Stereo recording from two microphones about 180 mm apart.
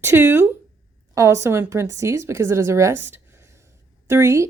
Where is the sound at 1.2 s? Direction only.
15° right (ahead or behind).